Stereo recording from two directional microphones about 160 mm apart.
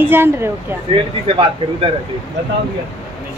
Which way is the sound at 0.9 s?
35° right (ahead or behind).